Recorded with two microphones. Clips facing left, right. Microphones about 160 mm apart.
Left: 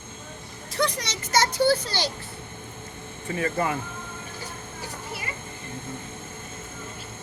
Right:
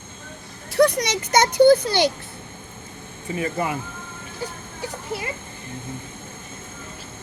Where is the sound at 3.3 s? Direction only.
15° right (ahead or behind).